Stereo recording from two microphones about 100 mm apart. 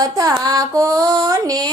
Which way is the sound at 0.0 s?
40° right (ahead or behind).